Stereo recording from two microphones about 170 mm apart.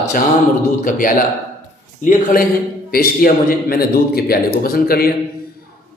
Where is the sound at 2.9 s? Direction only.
60° left (ahead or behind).